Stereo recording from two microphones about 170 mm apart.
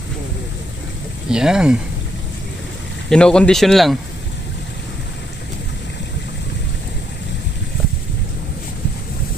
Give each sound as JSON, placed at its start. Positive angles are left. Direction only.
{"t": 1.3, "sound": "speech", "side_deg": -5}
{"t": 3.1, "sound": "speech", "side_deg": 5}